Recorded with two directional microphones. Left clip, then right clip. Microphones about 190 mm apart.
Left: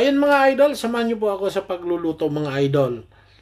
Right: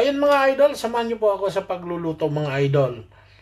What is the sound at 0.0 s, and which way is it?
Speech, 35° left (ahead or behind).